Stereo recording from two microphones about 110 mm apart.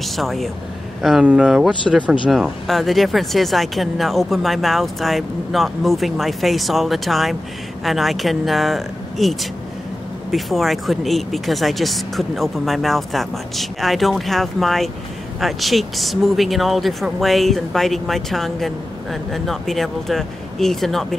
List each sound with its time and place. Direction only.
0.0 s speech: centre (ahead or behind)